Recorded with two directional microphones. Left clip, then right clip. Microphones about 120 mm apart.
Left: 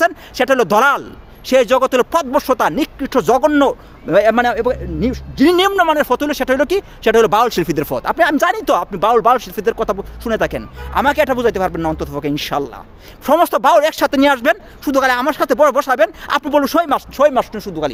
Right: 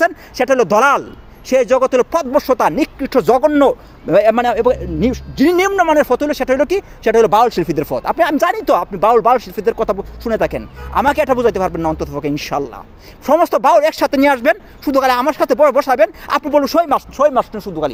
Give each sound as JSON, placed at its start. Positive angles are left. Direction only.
{"t": 0.3, "sound": "speech", "side_deg": 5}
{"t": 3.7, "sound": "a man's voice", "side_deg": -15}
{"t": 5.7, "sound": "speech", "side_deg": 10}
{"t": 7.4, "sound": "speech", "side_deg": 20}
{"t": 8.4, "sound": "speech", "side_deg": 0}